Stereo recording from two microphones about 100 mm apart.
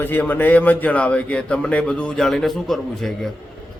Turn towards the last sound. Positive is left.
turn(degrees=0)  # may be behind; listen again after turning